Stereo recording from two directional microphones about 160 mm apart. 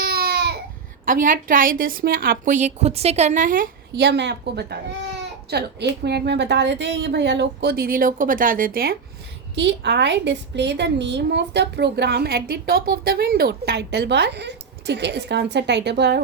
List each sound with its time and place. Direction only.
0.0 s baby cry: 70° right (ahead or behind)
1.0 s a woman's voice: 55° right (ahead or behind)
9.6 s a woman's voice: 90° right